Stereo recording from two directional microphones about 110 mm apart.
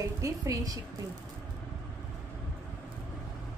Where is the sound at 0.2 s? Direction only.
30° right (ahead or behind).